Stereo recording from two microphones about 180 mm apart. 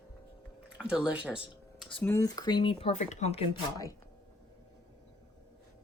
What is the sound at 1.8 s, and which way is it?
Speech, 10° left (ahead or behind).